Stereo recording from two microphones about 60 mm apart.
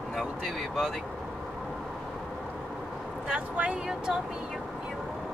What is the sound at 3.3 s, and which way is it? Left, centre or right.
Speech, centre.